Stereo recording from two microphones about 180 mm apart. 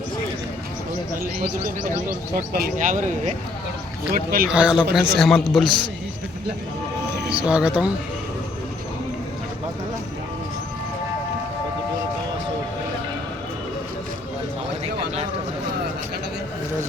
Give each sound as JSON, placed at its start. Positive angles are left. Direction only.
{"t": 1.4, "sound": "speech", "side_deg": -50}
{"t": 4.4, "sound": "a man's voice", "side_deg": -5}
{"t": 7.3, "sound": "a man's voice", "side_deg": -5}